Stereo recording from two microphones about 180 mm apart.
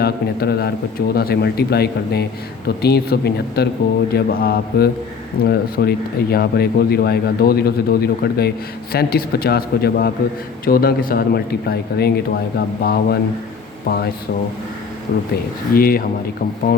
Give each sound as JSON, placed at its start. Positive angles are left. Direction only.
{"t": 0.0, "sound": "speech", "side_deg": 60}
{"t": 15.1, "sound": "speech", "side_deg": 65}
{"t": 15.7, "sound": "speech", "side_deg": 55}